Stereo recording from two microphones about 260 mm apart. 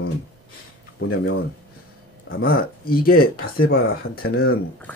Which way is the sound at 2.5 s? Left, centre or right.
Left.